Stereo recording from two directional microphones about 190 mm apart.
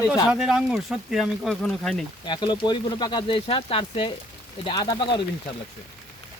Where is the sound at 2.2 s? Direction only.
25° left (ahead or behind).